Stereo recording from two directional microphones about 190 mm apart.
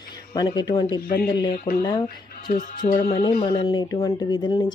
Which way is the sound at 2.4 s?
50° left (ahead or behind).